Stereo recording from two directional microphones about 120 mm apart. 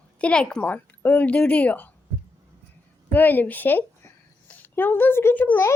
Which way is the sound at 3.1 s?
15° left (ahead or behind).